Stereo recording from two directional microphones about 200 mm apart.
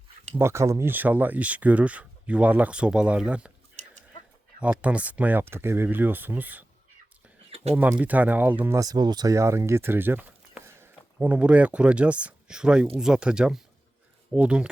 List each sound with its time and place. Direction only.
0.3 s speech: 15° right (ahead or behind)
4.6 s speech: 5° right (ahead or behind)
7.5 s a sound: 30° right (ahead or behind)
7.8 s speech: 10° right (ahead or behind)